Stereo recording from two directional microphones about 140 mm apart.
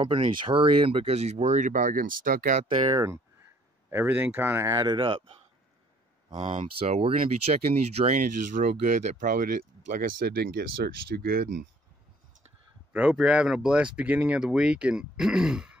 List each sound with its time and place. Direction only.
0.0 s speech: 35° right (ahead or behind); by 2.6 s 85° right
3.0 s speech: 20° right (ahead or behind)
4.9 s speech: 40° right (ahead or behind)
6.9 s speech: 45° right (ahead or behind)
8.2 s speech: 70° right (ahead or behind); by 11.6 s 90° right
12.9 s speech: 5° right (ahead or behind)